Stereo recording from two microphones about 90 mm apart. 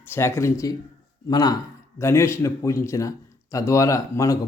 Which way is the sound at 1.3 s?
45° left (ahead or behind).